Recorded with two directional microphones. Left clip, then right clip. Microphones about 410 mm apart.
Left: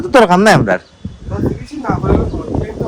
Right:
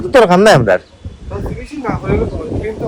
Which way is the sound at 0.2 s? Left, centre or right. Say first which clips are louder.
Right 1 dB; centre.